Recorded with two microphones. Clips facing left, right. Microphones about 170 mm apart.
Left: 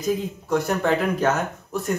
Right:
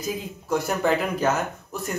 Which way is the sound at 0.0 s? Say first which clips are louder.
Left 6 dB; 5° right (ahead or behind).